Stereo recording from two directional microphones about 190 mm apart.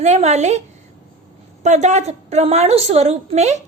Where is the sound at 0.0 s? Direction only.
35° right (ahead or behind).